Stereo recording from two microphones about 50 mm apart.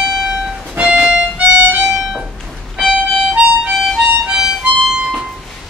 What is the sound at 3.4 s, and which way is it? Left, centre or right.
Harmonica, right.